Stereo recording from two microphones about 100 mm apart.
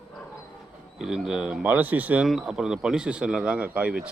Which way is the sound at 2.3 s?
5° right (ahead or behind).